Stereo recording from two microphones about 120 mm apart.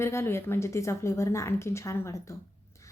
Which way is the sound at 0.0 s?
20° left (ahead or behind).